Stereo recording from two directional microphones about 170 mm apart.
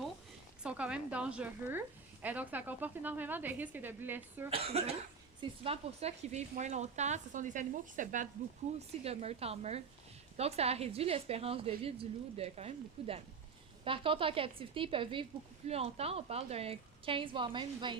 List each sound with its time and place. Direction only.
0.6 s speech: 5° right (ahead or behind)
4.4 s speech: 35° right (ahead or behind)
9.0 s speech: 35° right (ahead or behind)